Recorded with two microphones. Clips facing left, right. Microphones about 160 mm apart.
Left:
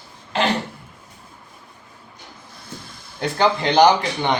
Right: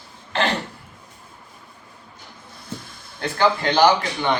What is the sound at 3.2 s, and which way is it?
Speech, 20° left (ahead or behind).